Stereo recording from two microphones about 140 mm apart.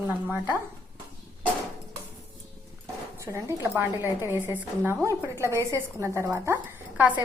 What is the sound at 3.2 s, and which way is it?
A woman's voice, 20° right (ahead or behind).